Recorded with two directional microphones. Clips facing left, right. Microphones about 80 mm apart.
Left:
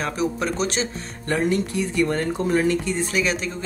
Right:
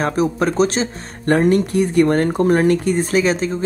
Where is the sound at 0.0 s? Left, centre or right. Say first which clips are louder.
Right 6 dB; right.